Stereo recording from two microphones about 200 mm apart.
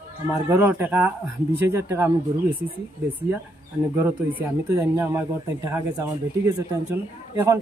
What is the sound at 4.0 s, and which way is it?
Speech, 10° right (ahead or behind).